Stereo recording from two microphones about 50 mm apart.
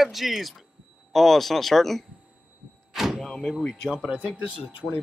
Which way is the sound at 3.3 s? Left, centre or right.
Centre.